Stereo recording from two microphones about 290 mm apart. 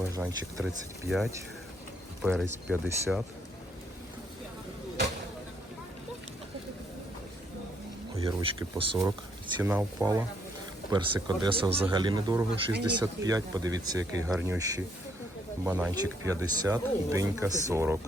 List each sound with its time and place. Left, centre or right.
0.1 s speech: centre
8.2 s speech: centre